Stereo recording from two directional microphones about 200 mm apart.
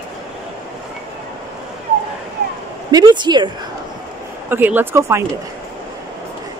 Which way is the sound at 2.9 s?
20° right (ahead or behind).